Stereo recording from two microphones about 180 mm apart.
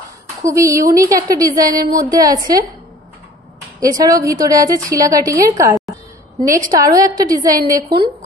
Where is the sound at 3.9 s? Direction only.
20° right (ahead or behind).